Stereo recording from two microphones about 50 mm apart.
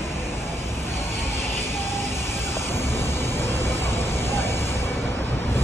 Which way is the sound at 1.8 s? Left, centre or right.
Left.